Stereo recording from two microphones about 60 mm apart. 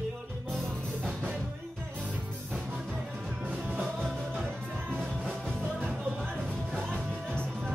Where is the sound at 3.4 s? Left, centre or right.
Right.